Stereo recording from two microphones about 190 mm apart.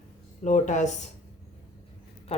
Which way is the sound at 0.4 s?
40° left (ahead or behind).